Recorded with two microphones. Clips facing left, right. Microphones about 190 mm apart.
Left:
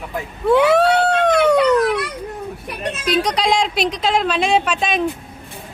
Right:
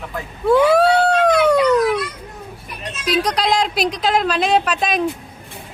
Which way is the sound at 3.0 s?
5° right (ahead or behind).